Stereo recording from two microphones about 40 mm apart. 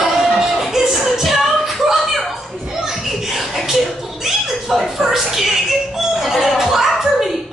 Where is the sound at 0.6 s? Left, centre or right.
Centre.